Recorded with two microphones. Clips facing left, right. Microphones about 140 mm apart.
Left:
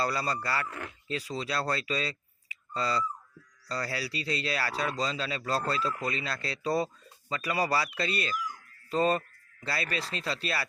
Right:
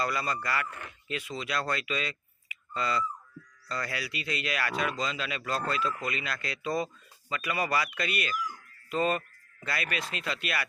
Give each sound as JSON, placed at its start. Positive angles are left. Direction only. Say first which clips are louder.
{"t": 0.0, "sound": "speech", "louder": "left 1 dB", "side_deg": 30}